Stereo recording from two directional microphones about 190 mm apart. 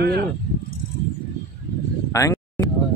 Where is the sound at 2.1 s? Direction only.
15° left (ahead or behind).